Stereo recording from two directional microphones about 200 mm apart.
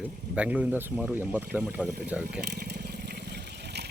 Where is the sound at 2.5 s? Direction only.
55° right (ahead or behind).